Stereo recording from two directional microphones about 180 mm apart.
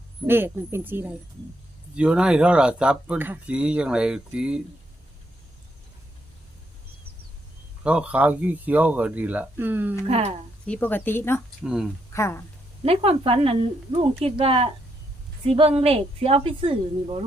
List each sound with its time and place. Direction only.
0.3 s speech: 10° right (ahead or behind)
7.9 s speech: 5° right (ahead or behind)
10.1 s speech: 35° right (ahead or behind)
10.7 s speech: 10° left (ahead or behind)
11.6 s speech: 5° right (ahead or behind)
12.1 s speech: 15° left (ahead or behind)
12.8 s speech: 35° right (ahead or behind)